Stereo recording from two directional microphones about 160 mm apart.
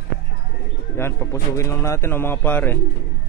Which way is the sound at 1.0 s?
15° left (ahead or behind).